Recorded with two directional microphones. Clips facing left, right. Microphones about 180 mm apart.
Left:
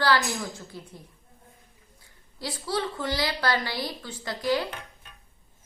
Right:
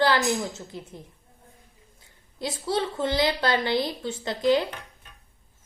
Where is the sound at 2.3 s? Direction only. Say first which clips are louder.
Right 3 dB; 25° right (ahead or behind).